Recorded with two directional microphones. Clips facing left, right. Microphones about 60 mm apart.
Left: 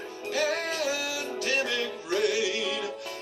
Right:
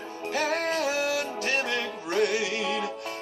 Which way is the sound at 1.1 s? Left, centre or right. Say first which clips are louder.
Right 2 dB; right.